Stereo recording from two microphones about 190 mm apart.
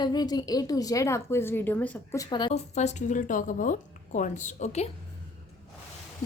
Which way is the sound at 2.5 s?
35° left (ahead or behind).